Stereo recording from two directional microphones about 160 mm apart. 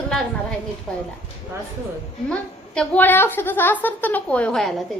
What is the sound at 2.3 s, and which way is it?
A woman's voice, 5° left (ahead or behind).